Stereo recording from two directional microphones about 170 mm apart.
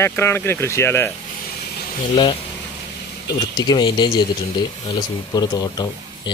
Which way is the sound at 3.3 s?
25° left (ahead or behind).